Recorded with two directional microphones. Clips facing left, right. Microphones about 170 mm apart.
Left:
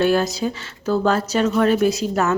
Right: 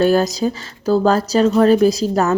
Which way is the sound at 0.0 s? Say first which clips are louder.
Right 3 dB; 40° right (ahead or behind).